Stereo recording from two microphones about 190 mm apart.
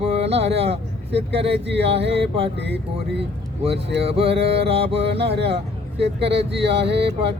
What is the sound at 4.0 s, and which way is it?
Speech, 30° right (ahead or behind).